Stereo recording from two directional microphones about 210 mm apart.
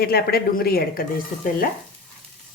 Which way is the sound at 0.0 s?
50° left (ahead or behind).